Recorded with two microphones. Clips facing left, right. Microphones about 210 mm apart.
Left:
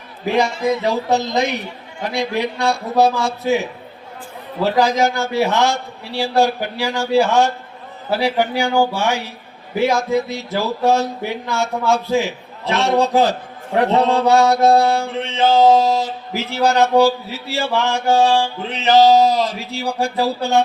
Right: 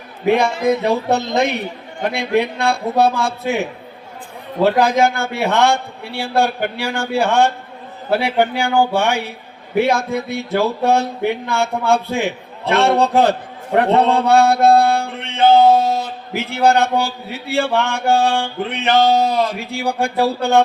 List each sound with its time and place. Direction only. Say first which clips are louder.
0.3 s mantra: right 3 dB; 55° right (ahead or behind)